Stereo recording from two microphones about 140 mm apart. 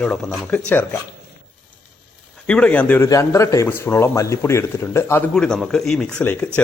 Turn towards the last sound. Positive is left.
turn(degrees=10)  # may be behind; listen again after turning